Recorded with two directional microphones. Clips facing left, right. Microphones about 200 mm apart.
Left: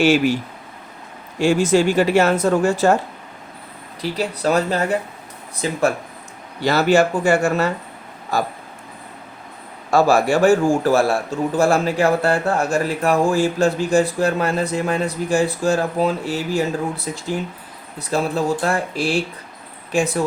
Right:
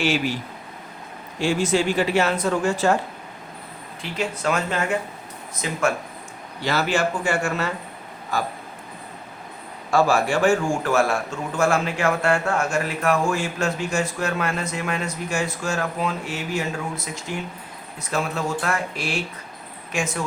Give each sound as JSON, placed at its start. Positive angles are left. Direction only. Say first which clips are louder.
{"t": 1.4, "sound": "speech", "louder": "left 5 dB", "side_deg": 45}
{"t": 4.0, "sound": "a man's voice", "louder": "left 4 dB", "side_deg": 35}
{"t": 9.9, "sound": "a man's voice", "louder": "left 4 dB", "side_deg": 40}